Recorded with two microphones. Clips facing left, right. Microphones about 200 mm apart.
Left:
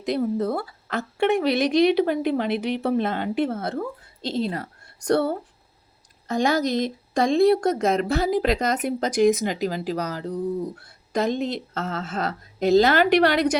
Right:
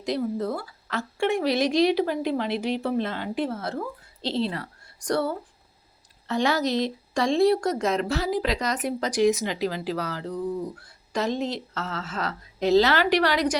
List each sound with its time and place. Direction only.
0.0 s a woman's voice: 55° left (ahead or behind)
5.0 s a woman's voice: 60° left (ahead or behind)
6.2 s speech: 45° left (ahead or behind)
11.3 s speech: 55° left (ahead or behind)